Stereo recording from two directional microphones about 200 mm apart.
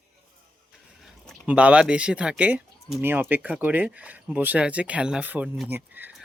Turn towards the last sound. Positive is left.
turn(degrees=-10)  # may be behind; listen again after turning